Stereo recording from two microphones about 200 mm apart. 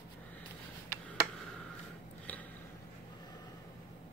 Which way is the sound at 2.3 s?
10° left (ahead or behind).